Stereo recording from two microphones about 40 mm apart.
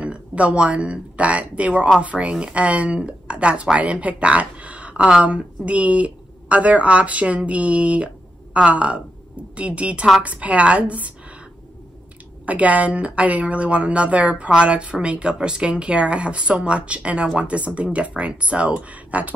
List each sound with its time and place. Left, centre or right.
0.0 s a woman's voice: right
12.4 s a woman's voice: right